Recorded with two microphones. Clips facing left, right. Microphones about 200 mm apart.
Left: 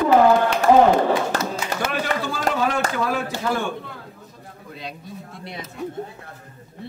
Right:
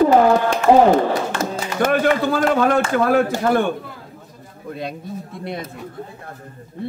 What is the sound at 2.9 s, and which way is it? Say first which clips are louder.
Speech: right 8 dB; 55° right (ahead or behind).